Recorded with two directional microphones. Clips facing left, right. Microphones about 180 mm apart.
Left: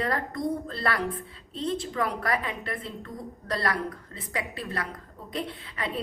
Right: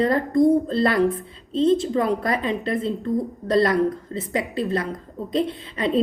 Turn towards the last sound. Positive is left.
turn(degrees=-25)  # may be behind; listen again after turning